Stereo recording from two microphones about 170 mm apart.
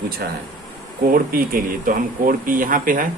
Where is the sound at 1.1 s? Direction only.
60° right (ahead or behind).